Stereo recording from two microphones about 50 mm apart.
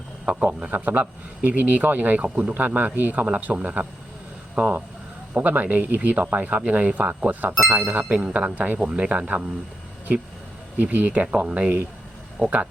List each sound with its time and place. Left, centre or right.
0.3 s speech: right
2.6 s speech: right
8.1 s speech: right
10.9 s speech: right
11.4 s speech: centre